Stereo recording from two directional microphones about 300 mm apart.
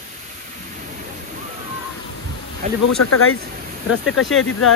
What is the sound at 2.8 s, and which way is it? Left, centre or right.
Speech, left.